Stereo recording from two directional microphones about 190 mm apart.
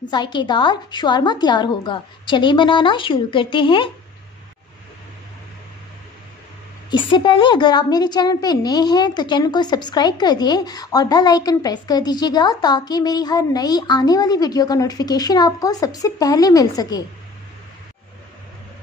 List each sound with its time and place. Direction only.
0.1 s a woman's voice: 25° left (ahead or behind)
6.9 s a woman's voice: 25° left (ahead or behind)